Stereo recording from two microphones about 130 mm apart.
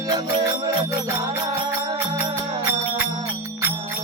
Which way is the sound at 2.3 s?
35° right (ahead or behind).